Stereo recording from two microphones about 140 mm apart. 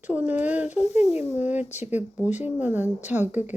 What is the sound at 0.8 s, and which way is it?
Speech, 50° left (ahead or behind).